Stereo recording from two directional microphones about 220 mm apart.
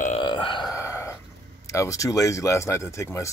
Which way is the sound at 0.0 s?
25° left (ahead or behind).